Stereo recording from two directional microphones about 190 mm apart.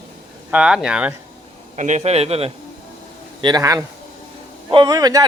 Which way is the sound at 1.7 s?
40° right (ahead or behind).